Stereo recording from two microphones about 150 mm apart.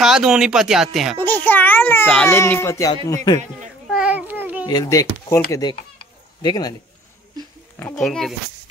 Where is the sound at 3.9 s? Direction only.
5° right (ahead or behind).